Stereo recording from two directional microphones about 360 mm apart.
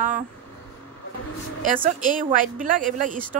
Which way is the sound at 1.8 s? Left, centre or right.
Right.